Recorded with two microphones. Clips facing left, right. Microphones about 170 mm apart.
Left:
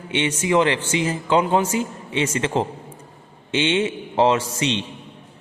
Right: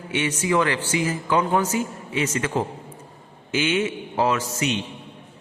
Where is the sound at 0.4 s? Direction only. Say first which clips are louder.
Left 3 dB; 20° left (ahead or behind).